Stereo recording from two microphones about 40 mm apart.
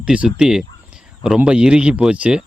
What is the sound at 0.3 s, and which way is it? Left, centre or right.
Speech, centre.